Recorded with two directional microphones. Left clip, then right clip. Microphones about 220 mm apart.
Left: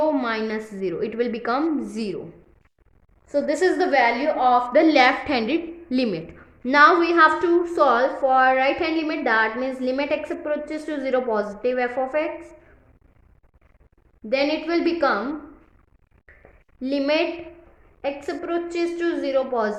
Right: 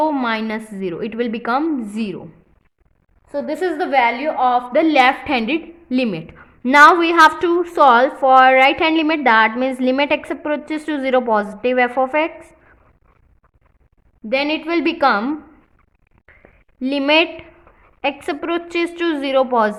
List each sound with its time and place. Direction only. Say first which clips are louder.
0.0 s a sound: right 3 dB; 30° right (ahead or behind)
0.8 s a woman's voice: right 1 dB; 30° right (ahead or behind)
3.2 s a woman's voice: left 1 dB; 15° right (ahead or behind); by 12.5 s 40° right (ahead or behind)
14.3 s a woman's voice: right 3 dB; 40° right (ahead or behind)
16.8 s a woman's voice: right 6 dB; 40° right (ahead or behind)